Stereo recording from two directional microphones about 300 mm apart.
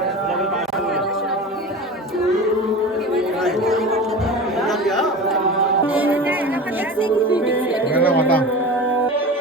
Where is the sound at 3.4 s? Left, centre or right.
Centre.